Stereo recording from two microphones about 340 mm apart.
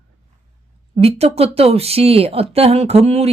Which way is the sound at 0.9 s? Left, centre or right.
Centre.